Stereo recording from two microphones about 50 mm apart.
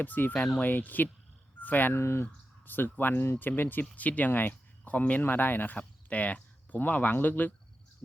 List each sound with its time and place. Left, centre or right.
0.0 s speech: left
2.0 s speech: left
2.2 s a sound: left
3.0 s speech: left
5.2 s speech: left
5.7 s speech: left